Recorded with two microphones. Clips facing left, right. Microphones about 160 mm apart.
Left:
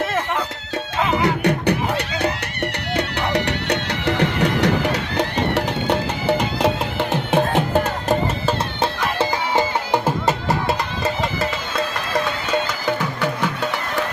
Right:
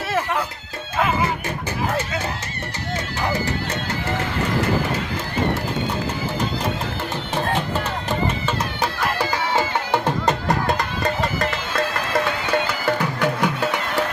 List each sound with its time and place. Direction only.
1.2 s music: 70° left (ahead or behind)
7.1 s music: 60° left (ahead or behind)
8.4 s music: 25° left (ahead or behind)
10.2 s music: 5° left (ahead or behind)
13.0 s music: 10° right (ahead or behind)